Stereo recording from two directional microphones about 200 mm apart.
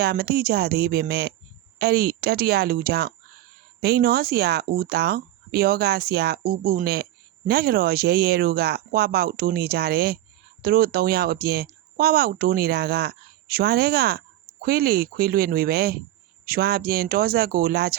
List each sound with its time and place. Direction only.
0.0 s speech: 50° right (ahead or behind)